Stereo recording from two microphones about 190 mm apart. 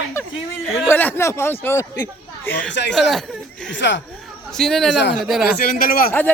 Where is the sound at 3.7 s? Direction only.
70° left (ahead or behind).